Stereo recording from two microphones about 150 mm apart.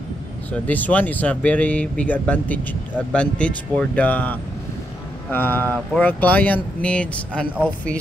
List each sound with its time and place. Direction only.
0.5 s speech: 10° left (ahead or behind)